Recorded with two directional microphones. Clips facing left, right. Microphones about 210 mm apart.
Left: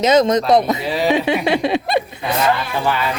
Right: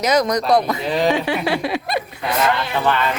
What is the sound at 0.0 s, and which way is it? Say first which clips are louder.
Speech: left 4 dB; 25° left (ahead or behind).